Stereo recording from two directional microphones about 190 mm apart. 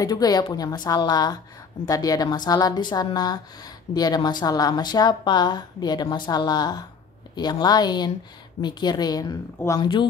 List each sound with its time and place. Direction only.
0.0 s a woman's voice: 20° left (ahead or behind)